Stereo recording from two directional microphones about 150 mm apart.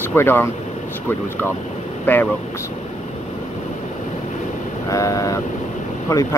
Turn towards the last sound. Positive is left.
turn(degrees=20)  # may be behind; listen again after turning